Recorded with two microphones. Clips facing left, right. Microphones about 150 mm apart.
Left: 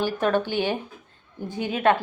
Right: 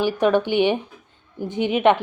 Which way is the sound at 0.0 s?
15° right (ahead or behind).